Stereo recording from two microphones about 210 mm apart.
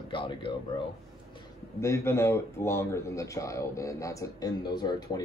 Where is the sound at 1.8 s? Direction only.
15° left (ahead or behind).